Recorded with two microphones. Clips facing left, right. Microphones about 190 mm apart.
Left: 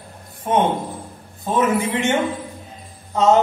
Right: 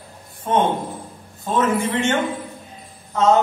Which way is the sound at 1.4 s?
15° left (ahead or behind).